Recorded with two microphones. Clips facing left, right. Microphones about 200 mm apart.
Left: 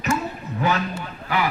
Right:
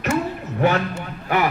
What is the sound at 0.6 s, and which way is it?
Speech, 60° right (ahead or behind).